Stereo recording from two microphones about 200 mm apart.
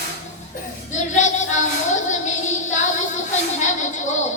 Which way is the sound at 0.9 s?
35° left (ahead or behind).